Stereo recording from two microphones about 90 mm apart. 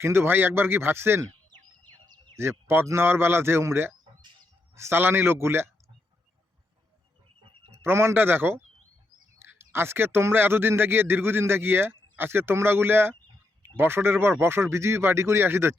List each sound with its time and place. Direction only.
0.0 s a man's voice: 30° right (ahead or behind)
2.3 s a man's voice: 30° right (ahead or behind)
7.8 s a man's voice: 30° right (ahead or behind)